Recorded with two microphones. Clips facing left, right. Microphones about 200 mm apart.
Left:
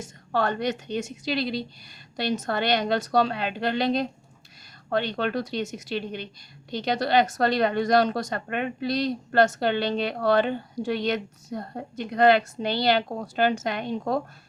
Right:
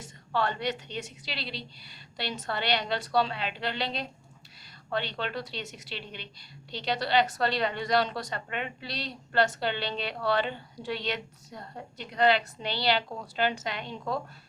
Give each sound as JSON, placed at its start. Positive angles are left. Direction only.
{"t": 0.0, "sound": "a woman's voice", "side_deg": 45}